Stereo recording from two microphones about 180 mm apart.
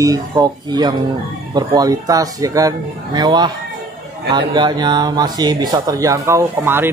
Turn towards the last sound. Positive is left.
turn(degrees=-10)  # may be behind; listen again after turning